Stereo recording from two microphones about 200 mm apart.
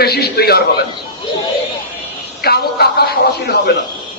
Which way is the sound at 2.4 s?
50° left (ahead or behind).